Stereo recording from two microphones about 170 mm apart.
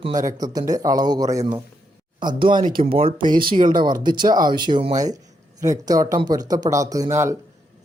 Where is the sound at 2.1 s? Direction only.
25° right (ahead or behind).